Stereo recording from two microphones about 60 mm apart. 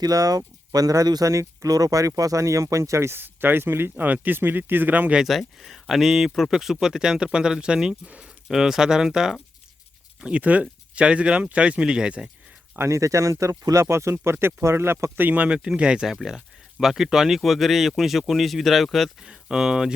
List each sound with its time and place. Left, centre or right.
0.0 s speech: right
3.2 s speech: right
5.3 s speech: centre
8.4 s speech: centre
10.2 s speech: right
12.9 s speech: right; by 19.1 s centre
19.2 s speech: centre